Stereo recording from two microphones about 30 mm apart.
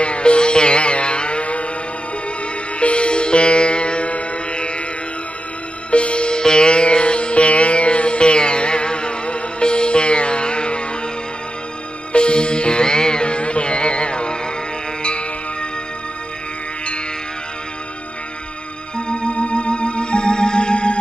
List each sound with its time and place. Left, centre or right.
0.0 s music: left
2.8 s music: left
5.9 s music: left
12.1 s music: left
18.9 s music: left